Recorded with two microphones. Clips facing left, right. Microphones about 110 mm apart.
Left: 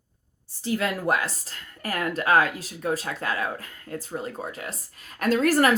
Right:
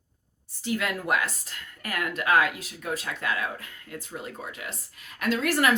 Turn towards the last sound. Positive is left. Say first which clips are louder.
# left 4 dB
turn(degrees=40)  # may be behind; listen again after turning